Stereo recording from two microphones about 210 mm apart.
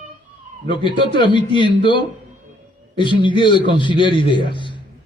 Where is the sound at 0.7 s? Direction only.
25° left (ahead or behind).